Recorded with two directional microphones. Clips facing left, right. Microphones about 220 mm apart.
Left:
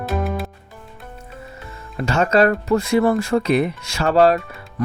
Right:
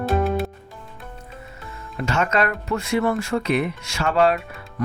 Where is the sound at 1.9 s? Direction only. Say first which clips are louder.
Left 5 dB; 35° left (ahead or behind).